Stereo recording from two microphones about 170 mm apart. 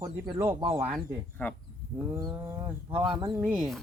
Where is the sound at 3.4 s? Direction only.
5° right (ahead or behind).